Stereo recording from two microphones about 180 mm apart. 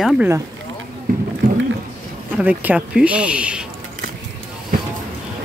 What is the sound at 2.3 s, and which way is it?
Speech, 10° right (ahead or behind).